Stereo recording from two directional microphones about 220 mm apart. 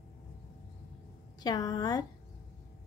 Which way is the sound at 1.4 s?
15° left (ahead or behind).